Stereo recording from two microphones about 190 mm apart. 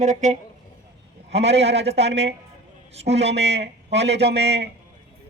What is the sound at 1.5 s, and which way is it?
Speech, 65° right (ahead or behind).